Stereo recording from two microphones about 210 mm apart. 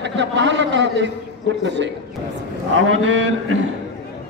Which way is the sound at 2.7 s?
70° right (ahead or behind).